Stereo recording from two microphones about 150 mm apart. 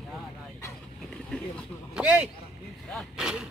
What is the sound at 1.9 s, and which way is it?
Speech, 5° right (ahead or behind).